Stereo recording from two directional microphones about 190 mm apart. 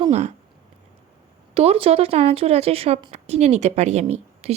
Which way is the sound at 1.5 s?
30° right (ahead or behind).